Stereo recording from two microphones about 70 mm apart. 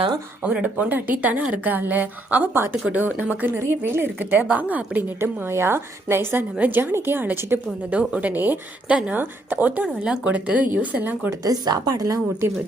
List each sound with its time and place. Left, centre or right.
0.4 s a woman's voice: centre
3.6 s a woman's voice: right; by 5.0 s centre
5.0 s a woman's voice: right
7.9 s a woman's voice: right
9.8 s a woman's voice: centre
11.3 s a woman's voice: right